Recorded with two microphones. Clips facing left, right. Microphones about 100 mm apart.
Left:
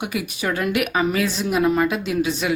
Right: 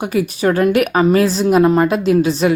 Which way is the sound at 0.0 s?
35° right (ahead or behind).